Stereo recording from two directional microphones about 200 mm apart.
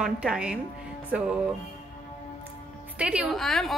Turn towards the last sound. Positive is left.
turn(degrees=0)  # may be behind; listen again after turning